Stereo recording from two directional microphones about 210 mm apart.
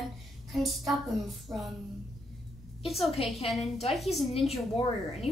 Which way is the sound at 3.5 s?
30° left (ahead or behind).